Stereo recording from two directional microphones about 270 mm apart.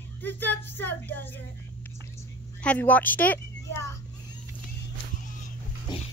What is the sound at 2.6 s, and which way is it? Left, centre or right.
A woman's voice, centre.